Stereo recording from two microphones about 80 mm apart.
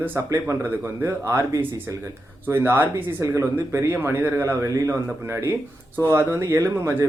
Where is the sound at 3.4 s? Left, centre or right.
Right.